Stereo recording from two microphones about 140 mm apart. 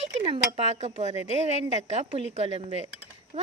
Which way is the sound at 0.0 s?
35° right (ahead or behind).